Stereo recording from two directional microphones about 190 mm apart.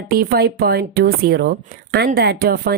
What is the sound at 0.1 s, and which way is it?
Speech, 50° right (ahead or behind).